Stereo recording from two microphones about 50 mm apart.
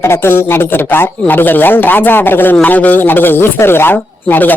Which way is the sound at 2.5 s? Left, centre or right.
Left.